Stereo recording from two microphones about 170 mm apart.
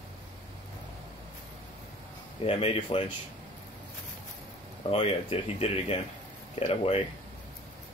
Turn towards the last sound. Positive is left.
turn(degrees=35)  # may be behind; listen again after turning